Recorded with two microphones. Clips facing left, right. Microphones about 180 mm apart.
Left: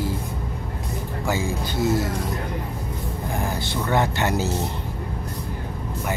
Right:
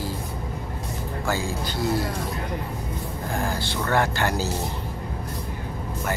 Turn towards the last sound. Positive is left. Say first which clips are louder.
# left 2 dB
turn(degrees=20)  # may be behind; listen again after turning